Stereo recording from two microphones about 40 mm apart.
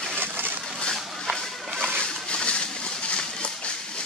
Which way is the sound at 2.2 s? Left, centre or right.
Left.